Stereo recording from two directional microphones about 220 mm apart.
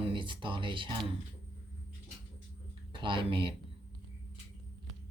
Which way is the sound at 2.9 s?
20° right (ahead or behind).